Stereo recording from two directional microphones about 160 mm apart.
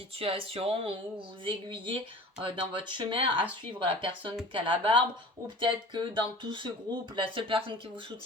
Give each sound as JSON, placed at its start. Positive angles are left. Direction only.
{"t": 0.2, "sound": "speech", "side_deg": -35}